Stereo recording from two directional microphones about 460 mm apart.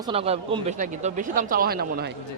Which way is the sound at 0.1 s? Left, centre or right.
Centre.